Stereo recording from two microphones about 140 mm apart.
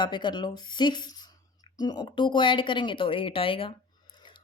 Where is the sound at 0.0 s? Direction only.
35° left (ahead or behind).